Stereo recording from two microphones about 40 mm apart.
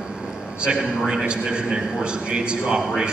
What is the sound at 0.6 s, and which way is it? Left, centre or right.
A man's voice, centre.